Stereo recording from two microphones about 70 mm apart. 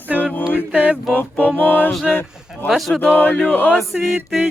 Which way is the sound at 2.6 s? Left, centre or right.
Centre.